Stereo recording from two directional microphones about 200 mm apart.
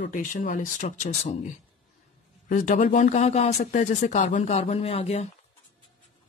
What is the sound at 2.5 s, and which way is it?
Speech, 40° left (ahead or behind).